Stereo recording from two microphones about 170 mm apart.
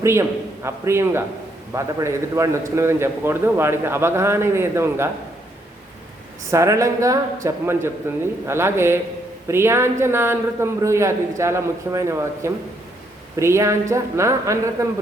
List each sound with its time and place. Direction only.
0.0 s a man's voice: 15° right (ahead or behind)
6.5 s a man's voice: 15° right (ahead or behind)